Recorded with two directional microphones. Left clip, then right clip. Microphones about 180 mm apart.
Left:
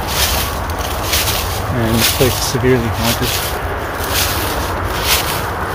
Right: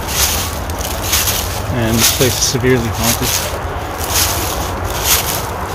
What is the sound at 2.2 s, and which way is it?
Speech, 10° right (ahead or behind).